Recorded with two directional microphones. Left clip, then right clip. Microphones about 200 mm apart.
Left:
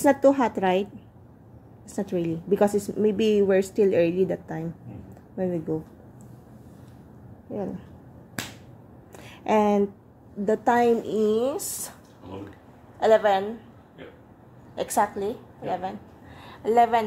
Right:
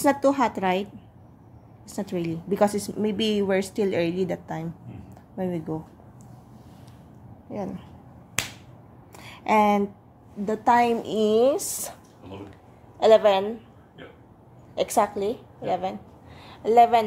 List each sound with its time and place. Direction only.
0.0 s a woman's voice: 5° right (ahead or behind)
1.9 s a woman's voice: 5° right (ahead or behind)
9.1 s a sound: centre (ahead or behind)
10.4 s a woman's voice: 5° right (ahead or behind); by 11.9 s 25° right (ahead or behind)
13.0 s a woman's voice: 5° right (ahead or behind)
14.8 s a woman's voice: 10° right (ahead or behind)